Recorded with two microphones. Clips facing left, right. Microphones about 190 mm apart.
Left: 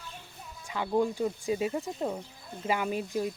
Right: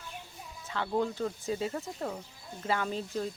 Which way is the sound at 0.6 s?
15° left (ahead or behind).